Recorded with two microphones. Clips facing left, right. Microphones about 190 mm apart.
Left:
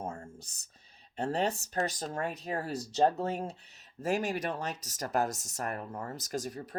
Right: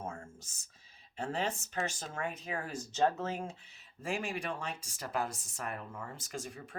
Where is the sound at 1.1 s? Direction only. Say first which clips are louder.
Left 5 dB; 40° left (ahead or behind).